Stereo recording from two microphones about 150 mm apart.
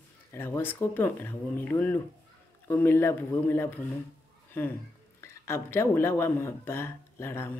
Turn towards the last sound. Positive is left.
turn(degrees=15)  # may be behind; listen again after turning